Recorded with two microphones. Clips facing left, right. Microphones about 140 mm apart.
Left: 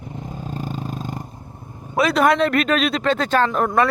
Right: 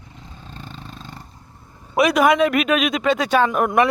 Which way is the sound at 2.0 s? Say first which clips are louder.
Right 1 dB; 15° right (ahead or behind).